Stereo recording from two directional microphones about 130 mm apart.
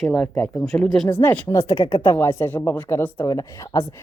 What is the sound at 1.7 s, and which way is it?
Speech, 40° left (ahead or behind).